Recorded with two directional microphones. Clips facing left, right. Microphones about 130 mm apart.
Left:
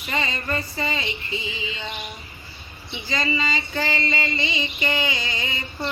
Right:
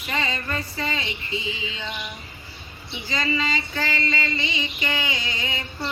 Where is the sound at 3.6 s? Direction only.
25° left (ahead or behind).